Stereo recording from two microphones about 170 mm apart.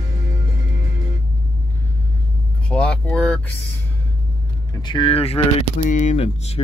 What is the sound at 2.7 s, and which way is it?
Vehicle, 5° left (ahead or behind).